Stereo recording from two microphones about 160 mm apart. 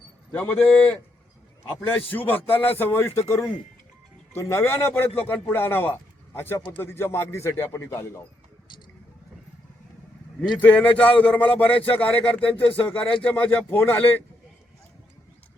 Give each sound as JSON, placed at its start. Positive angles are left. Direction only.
{"t": 0.3, "sound": "speech", "side_deg": 10}
{"t": 4.4, "sound": "speech", "side_deg": 15}
{"t": 10.6, "sound": "speech", "side_deg": 10}